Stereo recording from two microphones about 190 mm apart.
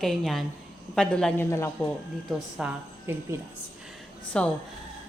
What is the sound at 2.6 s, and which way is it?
Speech, 10° right (ahead or behind).